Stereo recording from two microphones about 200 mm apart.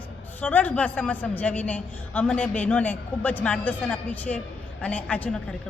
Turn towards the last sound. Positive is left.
turn(degrees=5)  # may be behind; listen again after turning